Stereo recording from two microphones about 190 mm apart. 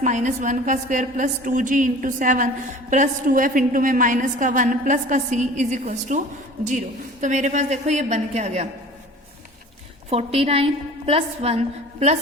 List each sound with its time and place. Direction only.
0.0 s a woman's voice: 40° right (ahead or behind)
10.1 s a woman's voice: 30° right (ahead or behind)